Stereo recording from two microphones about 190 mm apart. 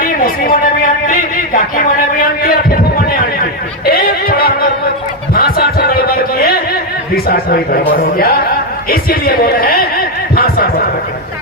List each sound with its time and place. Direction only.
0.0 s speech: 50° left (ahead or behind)
2.4 s a sound: 50° left (ahead or behind)
7.3 s speech: 50° left (ahead or behind)